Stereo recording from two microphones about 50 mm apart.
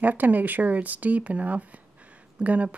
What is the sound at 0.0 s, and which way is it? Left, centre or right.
Speech, right.